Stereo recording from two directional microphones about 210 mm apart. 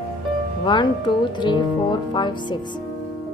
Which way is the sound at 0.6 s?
20° left (ahead or behind).